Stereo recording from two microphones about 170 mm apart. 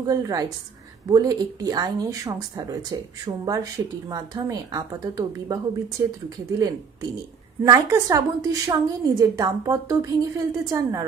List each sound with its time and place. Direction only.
0.0 s speech: 20° right (ahead or behind)
7.6 s speech: 20° right (ahead or behind)